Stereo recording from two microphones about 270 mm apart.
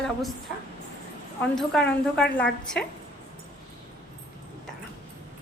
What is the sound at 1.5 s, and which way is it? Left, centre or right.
A woman's voice, centre.